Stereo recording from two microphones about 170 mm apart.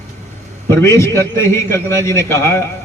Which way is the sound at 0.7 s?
15° left (ahead or behind).